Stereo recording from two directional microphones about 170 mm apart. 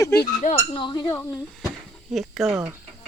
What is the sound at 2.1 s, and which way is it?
Speech, centre (ahead or behind).